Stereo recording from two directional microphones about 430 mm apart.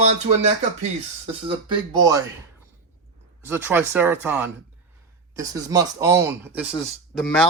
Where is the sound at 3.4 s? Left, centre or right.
Centre.